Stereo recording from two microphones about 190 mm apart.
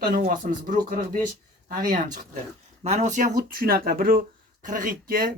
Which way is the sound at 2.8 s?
35° right (ahead or behind).